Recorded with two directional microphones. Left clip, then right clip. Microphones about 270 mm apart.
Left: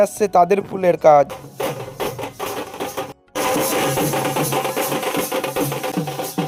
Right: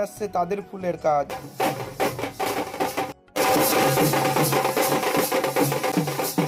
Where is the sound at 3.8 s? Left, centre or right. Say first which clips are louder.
Left 1 dB; centre.